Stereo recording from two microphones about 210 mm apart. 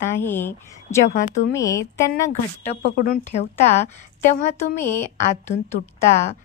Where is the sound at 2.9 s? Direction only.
40° left (ahead or behind).